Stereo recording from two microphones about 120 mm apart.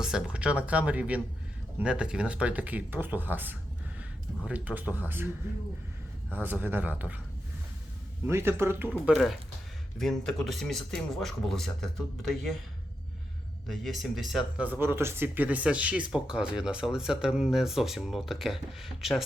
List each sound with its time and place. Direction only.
0.0 s speech: 5° right (ahead or behind)
6.3 s speech: 15° right (ahead or behind)
8.3 s speech: 20° right (ahead or behind)
9.1 s speech: centre (ahead or behind)
13.7 s speech: centre (ahead or behind)
14.6 s speech: 15° right (ahead or behind)